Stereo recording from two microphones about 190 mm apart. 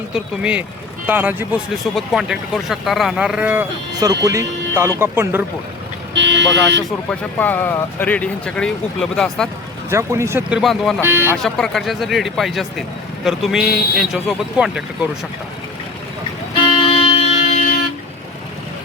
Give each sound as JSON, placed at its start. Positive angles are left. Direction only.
{"t": 0.1, "sound": "a man's voice", "side_deg": -5}
{"t": 6.1, "sound": "speech", "side_deg": -70}
{"t": 7.1, "sound": "speech", "side_deg": 10}
{"t": 9.9, "sound": "speech", "side_deg": -15}
{"t": 10.6, "sound": "a man's voice", "side_deg": 0}
{"t": 11.0, "sound": "speech", "side_deg": -10}
{"t": 11.4, "sound": "a man's voice", "side_deg": 0}
{"t": 16.9, "sound": "music", "side_deg": 30}